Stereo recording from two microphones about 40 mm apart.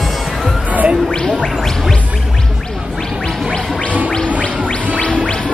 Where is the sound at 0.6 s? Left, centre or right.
Right.